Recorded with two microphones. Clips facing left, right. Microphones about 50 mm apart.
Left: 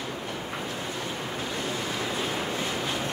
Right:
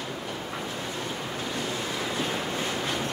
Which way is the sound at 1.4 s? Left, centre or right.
Centre.